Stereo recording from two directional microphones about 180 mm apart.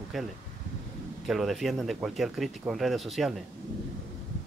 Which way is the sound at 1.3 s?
Centre (ahead or behind).